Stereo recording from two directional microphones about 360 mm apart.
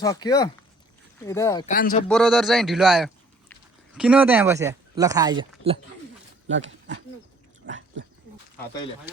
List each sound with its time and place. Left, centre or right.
0.0 s speech: centre
1.7 s speech: left
2.0 s a man's voice: centre
6.5 s speech: right
7.6 s dog: right